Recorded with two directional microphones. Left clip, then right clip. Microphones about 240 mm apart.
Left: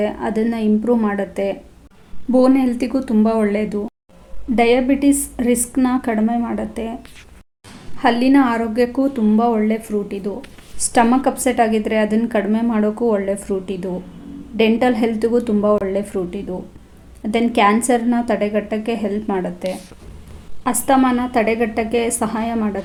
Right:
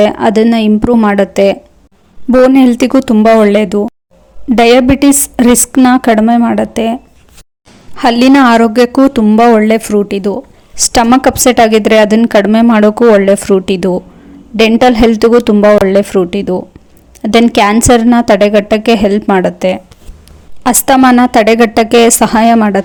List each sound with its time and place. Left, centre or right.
0.0 s a woman's voice: right